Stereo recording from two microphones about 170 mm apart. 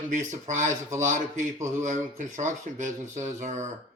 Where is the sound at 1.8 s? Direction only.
45° right (ahead or behind).